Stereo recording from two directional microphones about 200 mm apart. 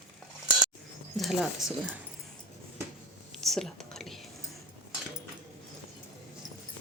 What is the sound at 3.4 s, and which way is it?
Whispering, centre (ahead or behind).